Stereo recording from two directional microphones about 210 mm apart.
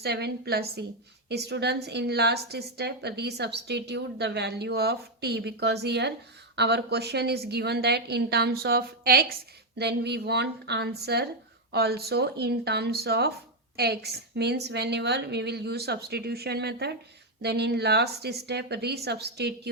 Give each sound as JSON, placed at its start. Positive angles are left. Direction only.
{"t": 0.0, "sound": "a woman's voice", "side_deg": -50}